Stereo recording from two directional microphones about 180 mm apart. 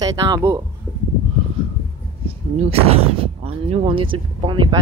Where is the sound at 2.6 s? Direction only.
35° right (ahead or behind).